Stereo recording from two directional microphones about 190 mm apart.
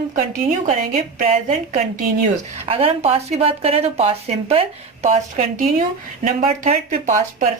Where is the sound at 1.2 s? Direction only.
40° right (ahead or behind).